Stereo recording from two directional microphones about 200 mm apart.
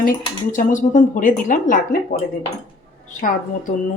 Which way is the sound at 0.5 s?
40° left (ahead or behind).